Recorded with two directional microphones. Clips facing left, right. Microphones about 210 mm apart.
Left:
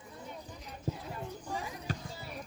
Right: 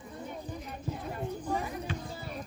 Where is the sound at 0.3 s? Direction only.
55° right (ahead or behind).